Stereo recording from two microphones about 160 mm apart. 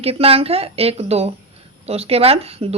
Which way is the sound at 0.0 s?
40° right (ahead or behind).